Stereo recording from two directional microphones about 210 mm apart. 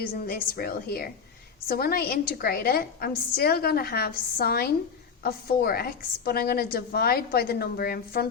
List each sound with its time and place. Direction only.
0.0 s a woman's voice: 45° left (ahead or behind)